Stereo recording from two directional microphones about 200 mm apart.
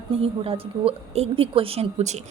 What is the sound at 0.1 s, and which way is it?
A woman's voice, 30° right (ahead or behind).